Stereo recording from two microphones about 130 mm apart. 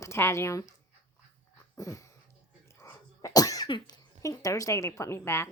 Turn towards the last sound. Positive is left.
turn(degrees=20)  # may be behind; listen again after turning